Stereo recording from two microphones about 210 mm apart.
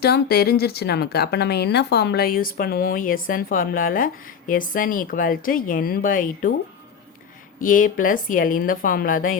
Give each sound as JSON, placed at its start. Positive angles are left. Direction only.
{"t": 0.0, "sound": "speech", "side_deg": 50}
{"t": 7.6, "sound": "a woman's voice", "side_deg": 40}